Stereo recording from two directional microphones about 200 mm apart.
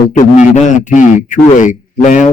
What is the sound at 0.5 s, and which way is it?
A man's voice, 40° left (ahead or behind).